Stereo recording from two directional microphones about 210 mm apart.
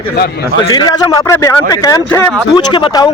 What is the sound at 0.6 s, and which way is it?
A man's voice, 20° left (ahead or behind).